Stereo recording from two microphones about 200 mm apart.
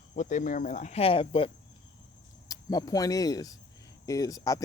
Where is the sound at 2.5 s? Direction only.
20° left (ahead or behind).